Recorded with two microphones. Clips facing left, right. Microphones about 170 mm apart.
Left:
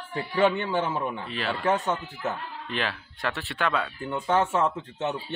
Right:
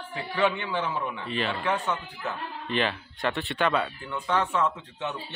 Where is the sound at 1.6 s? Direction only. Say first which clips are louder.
Left 7 dB; 45° left (ahead or behind).